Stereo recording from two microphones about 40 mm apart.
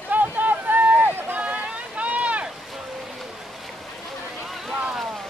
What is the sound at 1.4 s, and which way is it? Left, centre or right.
Boat, right.